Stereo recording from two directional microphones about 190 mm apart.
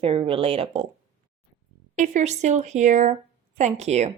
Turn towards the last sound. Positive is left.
turn(degrees=-35)  # may be behind; listen again after turning